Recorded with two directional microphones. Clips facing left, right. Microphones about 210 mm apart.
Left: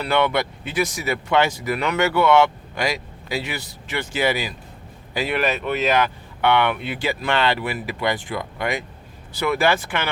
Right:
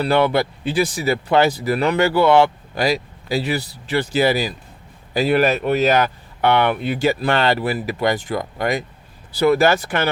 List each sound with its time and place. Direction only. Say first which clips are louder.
0.0 s speech: right 4 dB; 35° right (ahead or behind)